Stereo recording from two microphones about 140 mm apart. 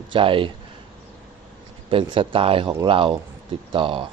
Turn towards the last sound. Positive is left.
turn(degrees=-40)  # may be behind; listen again after turning